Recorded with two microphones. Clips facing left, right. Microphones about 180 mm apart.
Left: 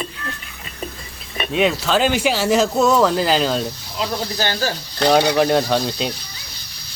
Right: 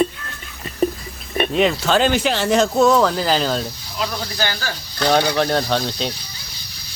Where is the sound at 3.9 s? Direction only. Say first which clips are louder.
Left 1 dB; 30° left (ahead or behind).